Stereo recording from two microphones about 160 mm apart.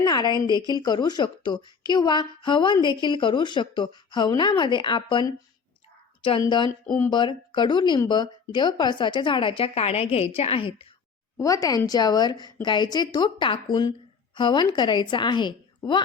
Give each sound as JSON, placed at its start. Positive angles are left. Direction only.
{"t": 0.0, "sound": "a sound", "side_deg": 25}
{"t": 0.4, "sound": "a woman's voice", "side_deg": 25}
{"t": 7.1, "sound": "a woman's voice", "side_deg": 30}
{"t": 11.3, "sound": "a woman's voice", "side_deg": 20}